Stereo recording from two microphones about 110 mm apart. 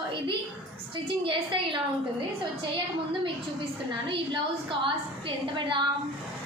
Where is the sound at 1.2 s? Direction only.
50° right (ahead or behind).